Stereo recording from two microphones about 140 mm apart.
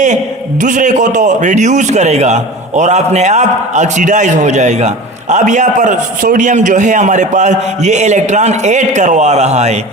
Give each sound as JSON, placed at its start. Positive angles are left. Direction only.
{"t": 0.6, "sound": "a man's voice", "side_deg": -65}